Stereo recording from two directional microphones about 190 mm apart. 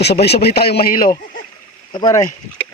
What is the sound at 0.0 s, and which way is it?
Speech, 60° left (ahead or behind).